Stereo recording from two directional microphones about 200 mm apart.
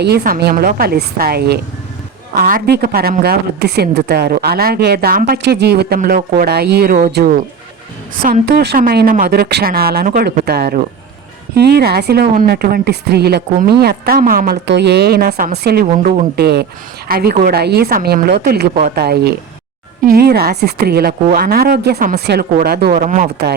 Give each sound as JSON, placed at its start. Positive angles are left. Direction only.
{"t": 0.0, "sound": "speech", "side_deg": -55}
{"t": 5.4, "sound": "speech", "side_deg": -55}